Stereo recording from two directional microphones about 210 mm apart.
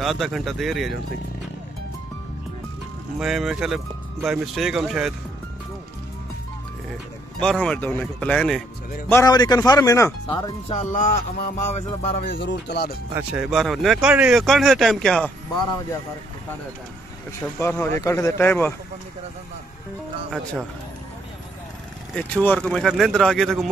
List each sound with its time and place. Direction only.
0.0 s speech: centre (ahead or behind)
3.2 s speech: centre (ahead or behind)
7.3 s speech: 5° left (ahead or behind)
9.1 s speech: 20° left (ahead or behind); by 11.8 s 40° left (ahead or behind)
11.9 s speech: 30° left (ahead or behind)
12.4 s speech: 55° left (ahead or behind)
13.1 s speech: 5° right (ahead or behind)
17.6 s speech: 10° left (ahead or behind)
22.1 s speech: 5° left (ahead or behind)